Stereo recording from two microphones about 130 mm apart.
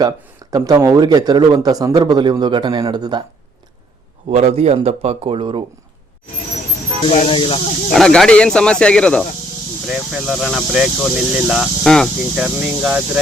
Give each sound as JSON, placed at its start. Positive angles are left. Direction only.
{"t": 0.5, "sound": "speech", "side_deg": -30}
{"t": 4.3, "sound": "speech", "side_deg": -55}
{"t": 7.3, "sound": "speech", "side_deg": 40}
{"t": 7.9, "sound": "speech", "side_deg": 5}
{"t": 9.8, "sound": "speech", "side_deg": -5}